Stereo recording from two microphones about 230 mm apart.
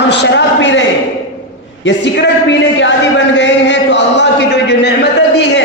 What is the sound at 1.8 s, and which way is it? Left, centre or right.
A man's voice, left.